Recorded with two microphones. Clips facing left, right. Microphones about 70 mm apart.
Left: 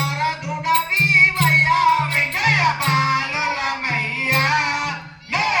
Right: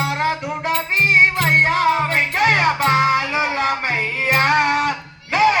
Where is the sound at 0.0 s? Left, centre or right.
Right.